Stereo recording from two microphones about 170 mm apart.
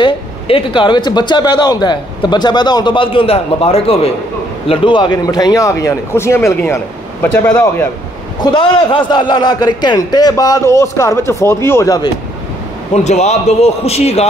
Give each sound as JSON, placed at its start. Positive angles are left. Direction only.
{"t": 0.0, "sound": "a man's voice", "side_deg": 30}
{"t": 8.4, "sound": "speech", "side_deg": 30}
{"t": 12.9, "sound": "a man's voice", "side_deg": 40}